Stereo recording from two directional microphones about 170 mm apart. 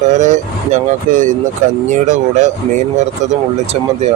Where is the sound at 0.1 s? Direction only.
45° right (ahead or behind).